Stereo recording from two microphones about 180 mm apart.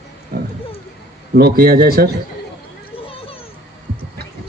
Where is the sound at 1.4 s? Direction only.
60° right (ahead or behind).